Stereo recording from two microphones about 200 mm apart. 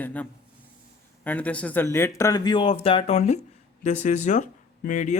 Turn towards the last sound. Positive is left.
turn(degrees=35)  # may be behind; listen again after turning